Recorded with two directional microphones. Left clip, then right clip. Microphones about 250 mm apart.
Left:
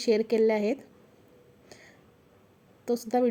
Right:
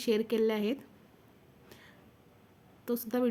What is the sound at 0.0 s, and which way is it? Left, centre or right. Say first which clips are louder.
Speech: left 5 dB; centre.